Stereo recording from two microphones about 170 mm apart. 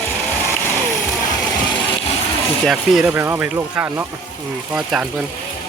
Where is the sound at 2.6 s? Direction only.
Centre (ahead or behind).